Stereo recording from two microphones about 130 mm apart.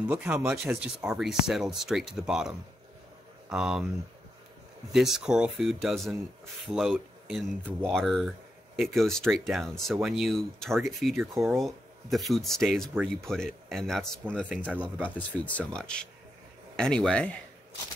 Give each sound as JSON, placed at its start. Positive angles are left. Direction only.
{"t": 0.0, "sound": "speech", "side_deg": -10}
{"t": 4.9, "sound": "speech", "side_deg": -5}
{"t": 11.3, "sound": "speech", "side_deg": -20}
{"t": 11.6, "sound": "speech", "side_deg": 0}
{"t": 14.5, "sound": "speech", "side_deg": -10}
{"t": 15.0, "sound": "speech", "side_deg": 10}